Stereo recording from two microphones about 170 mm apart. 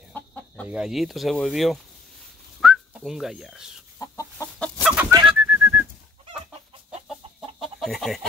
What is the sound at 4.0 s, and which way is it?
Chicken, 15° left (ahead or behind).